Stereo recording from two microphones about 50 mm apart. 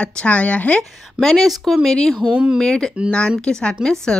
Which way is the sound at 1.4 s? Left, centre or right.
Centre.